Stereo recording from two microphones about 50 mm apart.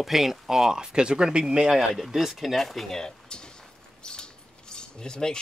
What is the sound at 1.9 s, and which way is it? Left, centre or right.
Speech, centre.